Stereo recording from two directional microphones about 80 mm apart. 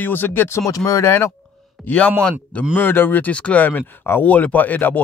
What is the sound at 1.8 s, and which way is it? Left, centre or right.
Speech, centre.